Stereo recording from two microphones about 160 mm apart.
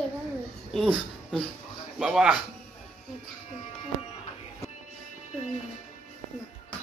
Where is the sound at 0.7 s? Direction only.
Centre (ahead or behind).